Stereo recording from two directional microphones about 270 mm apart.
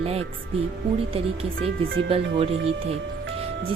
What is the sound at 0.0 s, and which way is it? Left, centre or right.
Speech, right.